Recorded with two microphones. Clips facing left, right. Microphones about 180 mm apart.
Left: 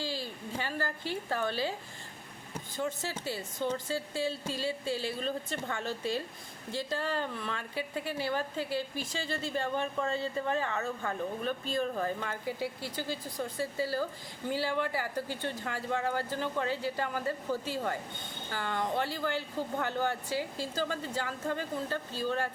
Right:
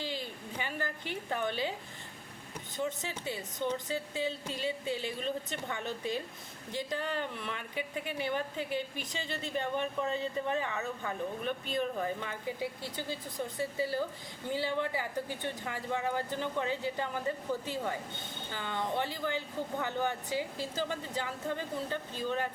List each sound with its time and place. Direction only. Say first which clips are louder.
0.0 s a woman's voice: left 2 dB; 20° right (ahead or behind)
2.7 s a woman's voice: left 1 dB; 20° right (ahead or behind)
18.5 s speech: left 2 dB; 20° right (ahead or behind)